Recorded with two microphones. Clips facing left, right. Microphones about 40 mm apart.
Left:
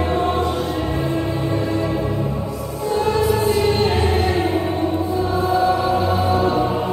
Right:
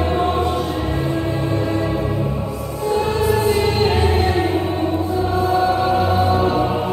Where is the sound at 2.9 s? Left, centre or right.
Right.